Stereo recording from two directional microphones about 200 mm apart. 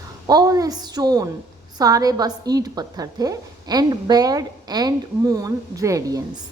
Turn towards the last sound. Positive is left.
turn(degrees=-15)  # may be behind; listen again after turning